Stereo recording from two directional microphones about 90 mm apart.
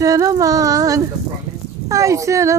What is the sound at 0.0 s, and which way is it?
Speech, 40° right (ahead or behind).